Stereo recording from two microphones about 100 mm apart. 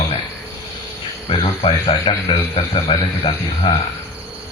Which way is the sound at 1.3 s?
65° left (ahead or behind).